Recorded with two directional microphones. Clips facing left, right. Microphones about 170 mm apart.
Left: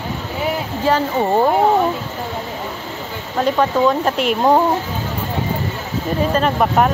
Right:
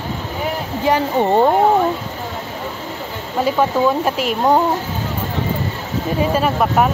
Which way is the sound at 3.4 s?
5° right (ahead or behind).